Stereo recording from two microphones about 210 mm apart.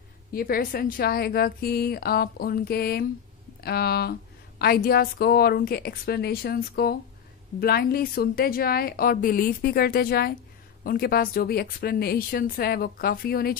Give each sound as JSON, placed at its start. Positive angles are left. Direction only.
{"t": 0.3, "sound": "a woman's voice", "side_deg": 45}